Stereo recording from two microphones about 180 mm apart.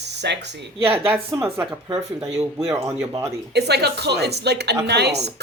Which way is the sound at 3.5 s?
65° right (ahead or behind).